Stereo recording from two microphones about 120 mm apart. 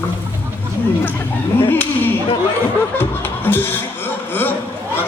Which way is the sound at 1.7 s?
15° left (ahead or behind).